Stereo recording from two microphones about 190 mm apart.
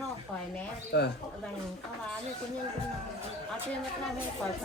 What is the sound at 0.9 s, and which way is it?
Speech, 60° left (ahead or behind).